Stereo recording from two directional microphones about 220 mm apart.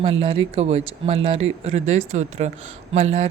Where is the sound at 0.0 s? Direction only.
25° right (ahead or behind).